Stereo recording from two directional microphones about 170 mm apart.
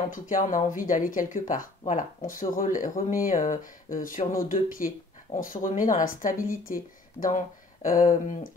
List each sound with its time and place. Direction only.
0.1 s speech: 50° left (ahead or behind)